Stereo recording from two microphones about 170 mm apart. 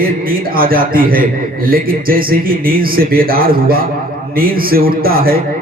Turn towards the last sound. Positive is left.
turn(degrees=-60)  # may be behind; listen again after turning